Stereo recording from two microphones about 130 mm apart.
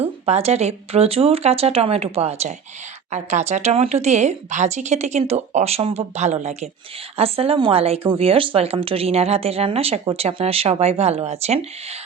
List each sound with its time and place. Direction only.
0.0 s speech: 55° right (ahead or behind)